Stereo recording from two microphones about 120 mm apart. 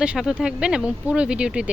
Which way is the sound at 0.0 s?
5° right (ahead or behind).